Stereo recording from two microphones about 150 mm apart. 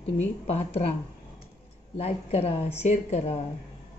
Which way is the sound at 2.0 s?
45° left (ahead or behind).